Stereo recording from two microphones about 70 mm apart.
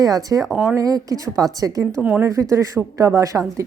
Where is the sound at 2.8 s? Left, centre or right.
Right.